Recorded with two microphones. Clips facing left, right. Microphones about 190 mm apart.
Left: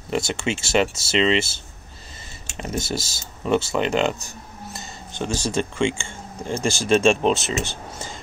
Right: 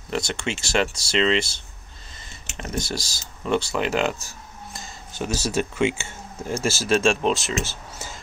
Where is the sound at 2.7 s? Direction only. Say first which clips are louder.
Left 2 dB; 25° left (ahead or behind).